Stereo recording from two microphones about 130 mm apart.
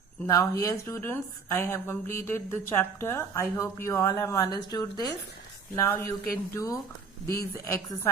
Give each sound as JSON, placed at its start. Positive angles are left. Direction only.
{"t": 0.3, "sound": "a woman's voice", "side_deg": 25}